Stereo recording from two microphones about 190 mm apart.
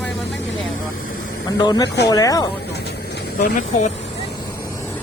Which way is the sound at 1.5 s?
20° left (ahead or behind).